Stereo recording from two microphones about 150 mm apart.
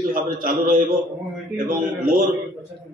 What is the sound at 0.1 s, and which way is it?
A man's voice, 65° right (ahead or behind).